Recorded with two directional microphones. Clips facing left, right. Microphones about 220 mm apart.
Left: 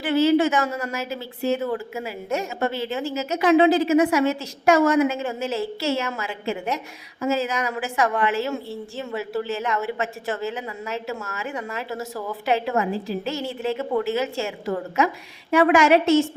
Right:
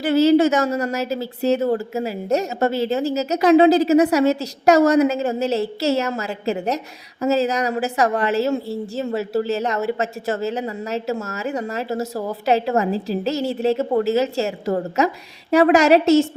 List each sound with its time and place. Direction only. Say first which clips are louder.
0.0 s a woman's voice: right 4 dB; 40° right (ahead or behind)